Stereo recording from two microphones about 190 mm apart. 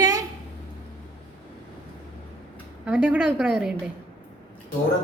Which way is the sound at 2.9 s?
10° right (ahead or behind).